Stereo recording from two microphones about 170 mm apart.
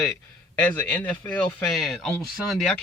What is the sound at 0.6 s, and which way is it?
Speech, 10° left (ahead or behind).